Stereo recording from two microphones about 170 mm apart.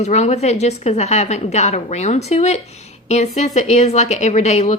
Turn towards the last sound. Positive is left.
turn(degrees=40)  # may be behind; listen again after turning